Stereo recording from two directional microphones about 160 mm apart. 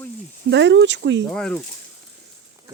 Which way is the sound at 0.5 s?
90° right.